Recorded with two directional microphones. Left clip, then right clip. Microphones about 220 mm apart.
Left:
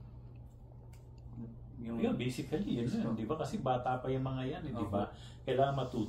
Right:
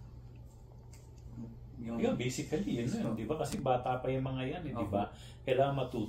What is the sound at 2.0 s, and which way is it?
Speech, 15° right (ahead or behind).